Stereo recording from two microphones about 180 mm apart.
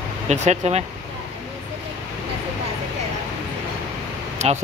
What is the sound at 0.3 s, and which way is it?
Speech, 40° right (ahead or behind).